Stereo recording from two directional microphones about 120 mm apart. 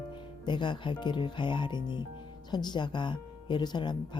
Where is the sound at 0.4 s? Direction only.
40° left (ahead or behind).